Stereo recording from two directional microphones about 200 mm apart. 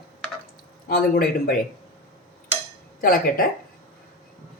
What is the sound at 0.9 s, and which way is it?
Speech, 50° left (ahead or behind).